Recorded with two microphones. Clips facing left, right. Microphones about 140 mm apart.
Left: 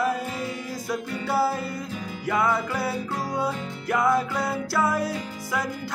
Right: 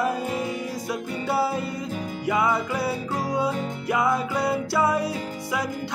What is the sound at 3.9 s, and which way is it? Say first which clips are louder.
Music: left 1 dB; 5° right (ahead or behind).